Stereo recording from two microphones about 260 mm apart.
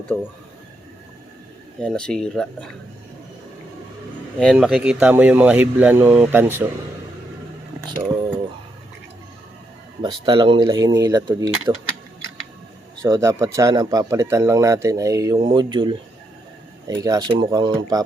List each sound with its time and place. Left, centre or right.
0.1 s speech: centre
1.8 s speech: centre
4.4 s speech: centre
10.0 s speech: centre
13.0 s speech: centre